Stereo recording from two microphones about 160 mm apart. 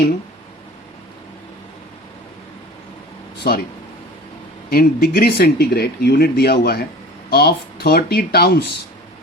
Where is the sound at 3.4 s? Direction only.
75° left (ahead or behind).